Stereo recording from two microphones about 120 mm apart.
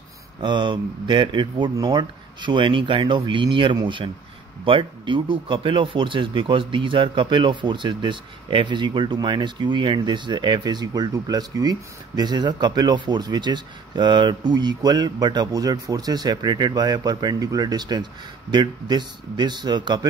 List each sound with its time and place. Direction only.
0.4 s speech: 40° right (ahead or behind)